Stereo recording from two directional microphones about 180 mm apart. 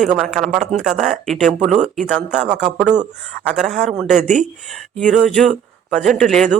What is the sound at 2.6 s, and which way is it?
A man's voice, 10° left (ahead or behind).